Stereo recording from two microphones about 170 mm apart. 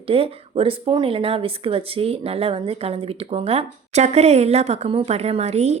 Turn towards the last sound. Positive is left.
turn(degrees=-40)  # may be behind; listen again after turning